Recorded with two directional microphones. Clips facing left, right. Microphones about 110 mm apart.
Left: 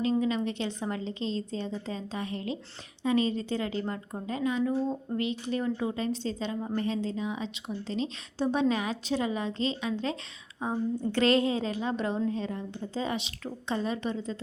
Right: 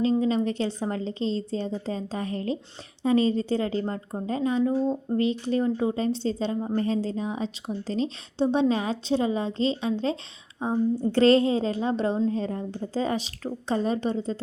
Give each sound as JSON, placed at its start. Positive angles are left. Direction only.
{"t": 0.0, "sound": "a woman's voice", "side_deg": -35}
{"t": 8.4, "sound": "a woman's voice", "side_deg": -25}